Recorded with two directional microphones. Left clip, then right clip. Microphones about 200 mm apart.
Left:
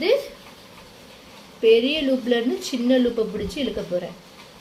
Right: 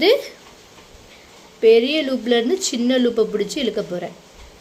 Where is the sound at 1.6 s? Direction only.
45° right (ahead or behind).